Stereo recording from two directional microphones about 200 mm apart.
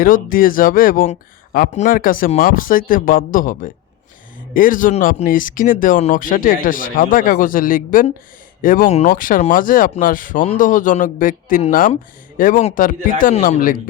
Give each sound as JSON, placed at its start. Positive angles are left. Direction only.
{"t": 0.0, "sound": "speech", "side_deg": 45}